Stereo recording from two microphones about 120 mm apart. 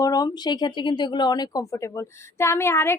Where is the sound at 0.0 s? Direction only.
30° left (ahead or behind).